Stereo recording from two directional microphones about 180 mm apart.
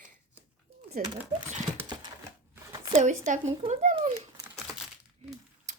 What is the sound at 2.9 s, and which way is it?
Speech, 40° right (ahead or behind).